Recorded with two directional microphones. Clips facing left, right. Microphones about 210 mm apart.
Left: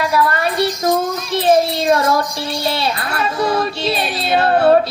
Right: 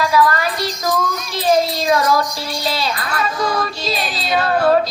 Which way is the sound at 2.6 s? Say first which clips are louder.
Left 1 dB; 25° left (ahead or behind).